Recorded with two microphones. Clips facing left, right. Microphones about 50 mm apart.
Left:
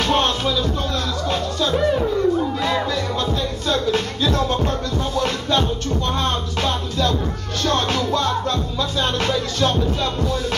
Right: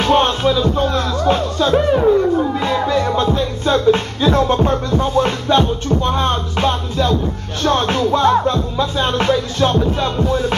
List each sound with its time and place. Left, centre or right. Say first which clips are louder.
0.0 s music: right 5 dB; right